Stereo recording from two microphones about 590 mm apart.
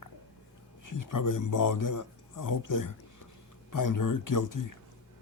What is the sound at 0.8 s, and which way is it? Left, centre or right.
Speech, left.